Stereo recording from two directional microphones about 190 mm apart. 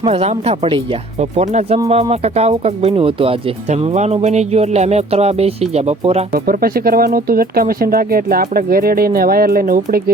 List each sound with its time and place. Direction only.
0.0 s speech: 35° right (ahead or behind)
6.3 s speech: 50° right (ahead or behind)